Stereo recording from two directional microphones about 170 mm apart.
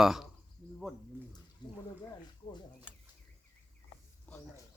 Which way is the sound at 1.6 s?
25° left (ahead or behind).